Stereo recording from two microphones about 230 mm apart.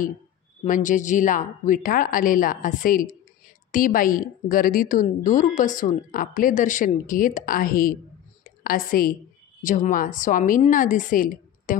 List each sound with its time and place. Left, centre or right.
0.7 s a woman's voice: left